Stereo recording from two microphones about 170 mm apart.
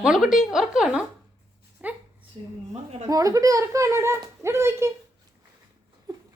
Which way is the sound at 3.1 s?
20° right (ahead or behind).